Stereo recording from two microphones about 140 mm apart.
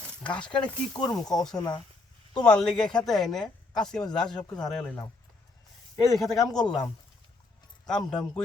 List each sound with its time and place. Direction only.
0.2 s speech: 10° left (ahead or behind)
0.6 s speech: 35° left (ahead or behind)
1.1 s speech: 5° left (ahead or behind)
1.5 s speech: 30° left (ahead or behind)
2.3 s speech: 5° left (ahead or behind)
6.1 s speech: centre (ahead or behind)
7.9 s speech: 5° left (ahead or behind)